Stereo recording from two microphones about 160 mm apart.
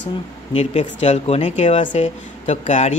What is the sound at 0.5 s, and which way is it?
Speech, 40° left (ahead or behind).